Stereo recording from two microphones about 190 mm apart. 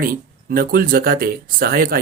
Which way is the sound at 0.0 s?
50° right (ahead or behind).